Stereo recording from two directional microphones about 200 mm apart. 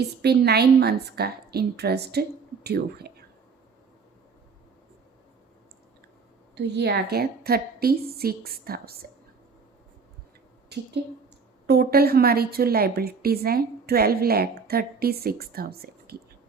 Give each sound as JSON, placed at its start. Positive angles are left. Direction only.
{"t": 0.0, "sound": "a woman's voice", "side_deg": -55}
{"t": 6.6, "sound": "a woman's voice", "side_deg": -55}
{"t": 10.7, "sound": "a woman's voice", "side_deg": -55}